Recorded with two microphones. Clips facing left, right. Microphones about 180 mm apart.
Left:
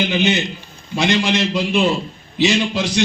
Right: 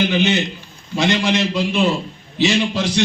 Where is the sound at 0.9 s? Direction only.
15° left (ahead or behind).